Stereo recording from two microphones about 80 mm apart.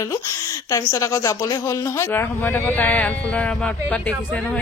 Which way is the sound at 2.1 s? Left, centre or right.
Left.